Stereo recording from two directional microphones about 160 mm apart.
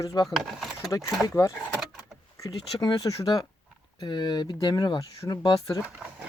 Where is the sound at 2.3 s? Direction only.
20° left (ahead or behind).